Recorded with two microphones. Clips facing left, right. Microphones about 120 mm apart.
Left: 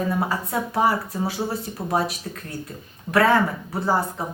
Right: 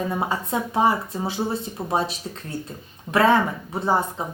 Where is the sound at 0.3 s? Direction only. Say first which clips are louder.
Even; 25° right (ahead or behind).